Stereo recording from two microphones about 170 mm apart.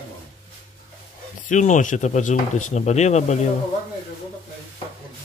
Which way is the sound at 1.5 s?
45° left (ahead or behind).